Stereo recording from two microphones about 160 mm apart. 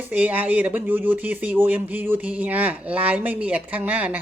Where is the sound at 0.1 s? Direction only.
10° right (ahead or behind).